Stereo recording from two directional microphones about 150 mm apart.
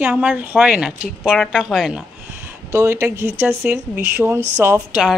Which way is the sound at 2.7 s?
20° right (ahead or behind).